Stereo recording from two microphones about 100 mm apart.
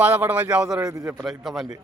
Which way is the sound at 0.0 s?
20° right (ahead or behind).